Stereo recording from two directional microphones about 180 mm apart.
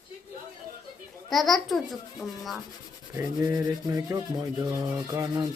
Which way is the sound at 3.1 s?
20° right (ahead or behind).